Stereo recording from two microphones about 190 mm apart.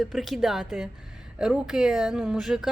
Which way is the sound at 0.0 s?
Centre (ahead or behind).